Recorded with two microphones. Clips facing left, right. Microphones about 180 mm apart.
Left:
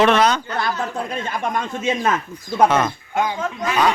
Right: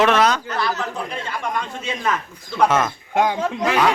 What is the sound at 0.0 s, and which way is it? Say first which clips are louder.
Speech: left 1 dB; centre (ahead or behind).